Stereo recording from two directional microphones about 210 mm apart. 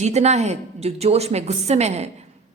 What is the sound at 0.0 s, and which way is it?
A woman's voice, 30° right (ahead or behind).